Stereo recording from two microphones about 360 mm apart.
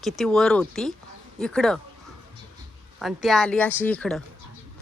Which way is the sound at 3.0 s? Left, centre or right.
Centre.